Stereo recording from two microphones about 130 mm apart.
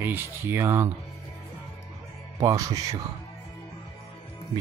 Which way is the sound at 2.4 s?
25° right (ahead or behind).